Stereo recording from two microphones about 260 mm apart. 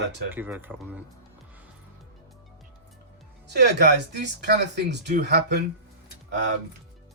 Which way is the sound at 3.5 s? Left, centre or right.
Right.